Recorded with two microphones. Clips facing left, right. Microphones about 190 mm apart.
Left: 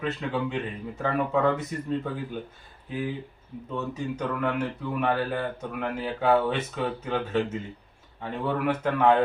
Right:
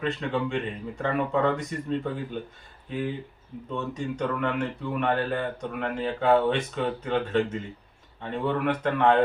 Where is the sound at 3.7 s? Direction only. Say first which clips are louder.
Even; 5° left (ahead or behind).